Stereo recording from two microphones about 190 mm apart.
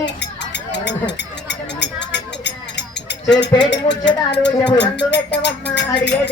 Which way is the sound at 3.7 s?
65° left (ahead or behind).